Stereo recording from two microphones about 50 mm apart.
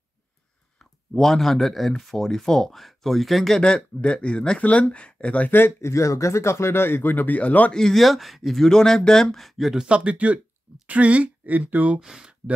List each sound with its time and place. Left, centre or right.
0.7 s speech: centre
3.6 s speech: centre
5.5 s speech: left
5.9 s speech: left
7.7 s speech: centre
9.8 s speech: right
12.0 s speech: centre